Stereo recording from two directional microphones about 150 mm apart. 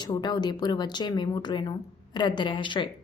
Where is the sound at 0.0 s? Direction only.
30° left (ahead or behind).